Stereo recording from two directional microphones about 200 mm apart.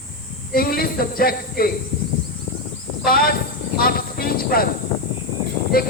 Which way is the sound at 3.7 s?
50° left (ahead or behind).